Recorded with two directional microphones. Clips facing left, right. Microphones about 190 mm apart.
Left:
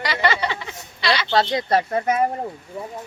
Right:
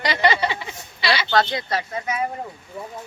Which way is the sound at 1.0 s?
5° right (ahead or behind).